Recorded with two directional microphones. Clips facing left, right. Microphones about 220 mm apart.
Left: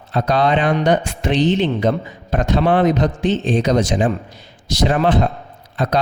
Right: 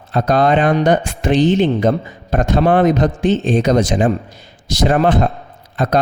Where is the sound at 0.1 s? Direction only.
50° right (ahead or behind).